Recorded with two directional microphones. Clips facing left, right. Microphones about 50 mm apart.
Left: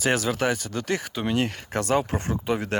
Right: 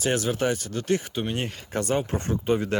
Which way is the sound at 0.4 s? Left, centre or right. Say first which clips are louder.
Even; left.